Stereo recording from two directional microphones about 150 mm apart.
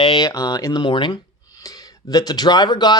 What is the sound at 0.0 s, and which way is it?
Speech, 30° left (ahead or behind).